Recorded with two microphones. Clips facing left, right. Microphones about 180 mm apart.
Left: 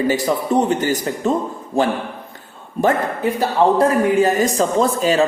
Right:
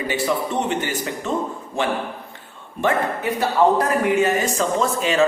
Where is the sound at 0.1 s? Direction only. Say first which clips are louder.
Left 5 dB; 40° left (ahead or behind).